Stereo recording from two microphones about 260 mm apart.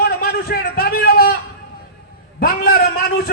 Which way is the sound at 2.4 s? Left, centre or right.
Left.